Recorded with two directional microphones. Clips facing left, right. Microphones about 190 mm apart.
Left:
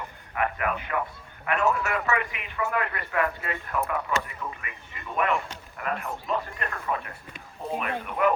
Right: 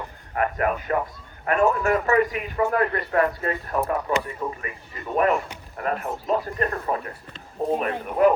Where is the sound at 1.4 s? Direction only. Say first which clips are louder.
Right 5 dB; 40° right (ahead or behind).